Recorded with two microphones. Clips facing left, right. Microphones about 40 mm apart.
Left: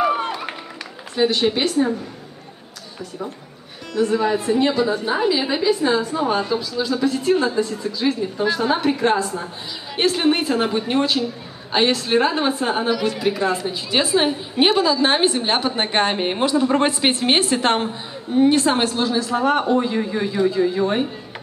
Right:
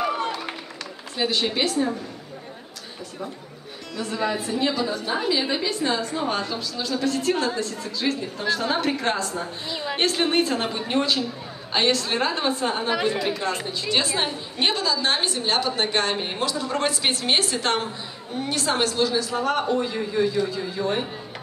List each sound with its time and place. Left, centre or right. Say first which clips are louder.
0.0 s run: left 5 dB; centre
1.1 s a woman's voice: left 6 dB; centre
4.0 s a woman's voice: left 7 dB; centre
12.9 s speech: left 1 dB; right
13.2 s a woman's voice: left 5 dB; centre